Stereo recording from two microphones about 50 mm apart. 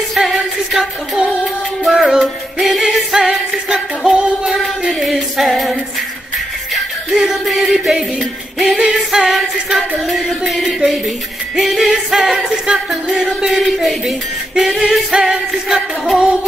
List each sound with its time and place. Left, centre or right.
0.1 s music: centre
4.5 s music: centre